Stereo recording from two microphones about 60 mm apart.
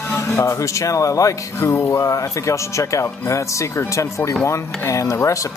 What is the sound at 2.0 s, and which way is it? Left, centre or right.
Speech, left.